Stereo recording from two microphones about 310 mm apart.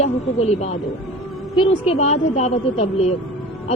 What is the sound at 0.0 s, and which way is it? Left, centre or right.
A woman's voice, centre.